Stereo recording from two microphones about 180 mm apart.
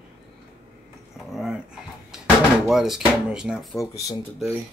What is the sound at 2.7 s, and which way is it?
Speech, centre (ahead or behind).